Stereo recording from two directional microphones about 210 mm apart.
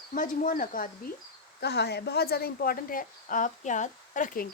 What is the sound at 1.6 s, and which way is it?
Speech, 50° left (ahead or behind).